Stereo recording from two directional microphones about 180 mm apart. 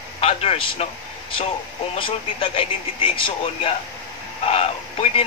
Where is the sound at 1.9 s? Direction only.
30° left (ahead or behind).